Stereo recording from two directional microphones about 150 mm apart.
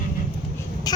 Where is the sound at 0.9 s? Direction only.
25° left (ahead or behind).